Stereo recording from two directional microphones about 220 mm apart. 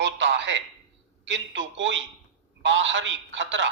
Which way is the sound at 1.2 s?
55° right (ahead or behind).